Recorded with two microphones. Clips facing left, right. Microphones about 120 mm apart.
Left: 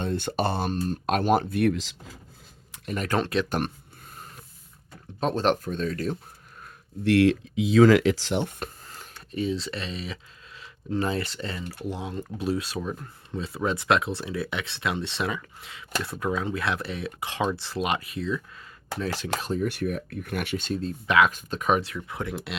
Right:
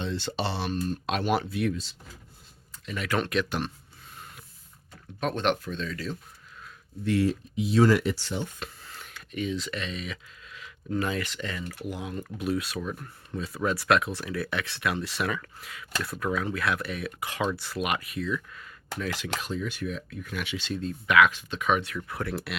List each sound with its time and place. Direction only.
0.0 s speech: 50° left (ahead or behind)
1.7 s speech: 90° left
2.8 s speech: 45° left (ahead or behind)
5.2 s speech: 35° left (ahead or behind)
7.0 s speech: 85° left; by 19.6 s 40° left (ahead or behind)
19.6 s speech: 55° left (ahead or behind); by 21.9 s 35° left (ahead or behind)
21.9 s speech: 20° left (ahead or behind)